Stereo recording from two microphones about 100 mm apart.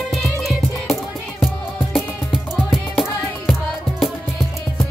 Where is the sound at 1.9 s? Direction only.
Centre (ahead or behind).